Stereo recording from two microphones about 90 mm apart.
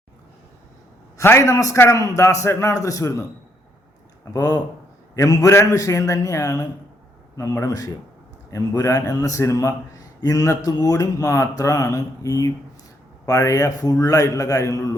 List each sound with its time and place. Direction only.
1.2 s a man's voice: 30° left (ahead or behind)
4.3 s a man's voice: 45° left (ahead or behind)